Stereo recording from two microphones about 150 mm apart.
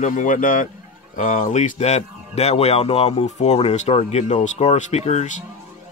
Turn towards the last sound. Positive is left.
turn(degrees=50)  # may be behind; listen again after turning